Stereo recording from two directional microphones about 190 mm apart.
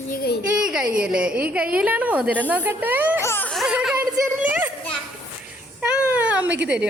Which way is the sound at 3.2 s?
10° left (ahead or behind).